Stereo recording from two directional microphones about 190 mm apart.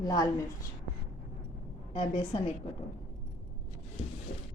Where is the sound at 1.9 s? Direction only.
25° left (ahead or behind).